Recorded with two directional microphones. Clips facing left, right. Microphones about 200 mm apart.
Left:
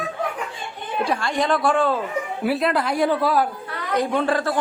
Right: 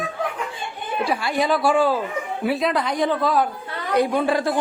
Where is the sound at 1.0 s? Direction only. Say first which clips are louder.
Right 1 dB; 5° right (ahead or behind).